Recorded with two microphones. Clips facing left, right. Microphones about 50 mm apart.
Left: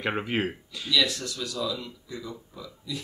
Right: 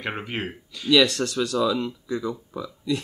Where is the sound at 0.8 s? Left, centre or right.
Right.